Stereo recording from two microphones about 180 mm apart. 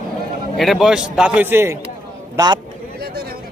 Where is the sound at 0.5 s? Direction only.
Centre (ahead or behind); by 2.6 s 20° right (ahead or behind).